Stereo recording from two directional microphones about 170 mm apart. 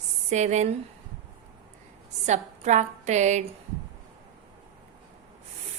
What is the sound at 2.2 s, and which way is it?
A woman's voice, 45° right (ahead or behind).